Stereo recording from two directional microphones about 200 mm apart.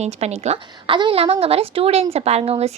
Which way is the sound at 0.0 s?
30° right (ahead or behind).